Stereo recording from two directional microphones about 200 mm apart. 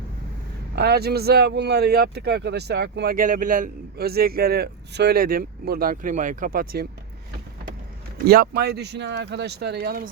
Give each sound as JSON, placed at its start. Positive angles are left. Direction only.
{"t": 0.8, "sound": "speech", "side_deg": -50}
{"t": 8.3, "sound": "speech", "side_deg": -50}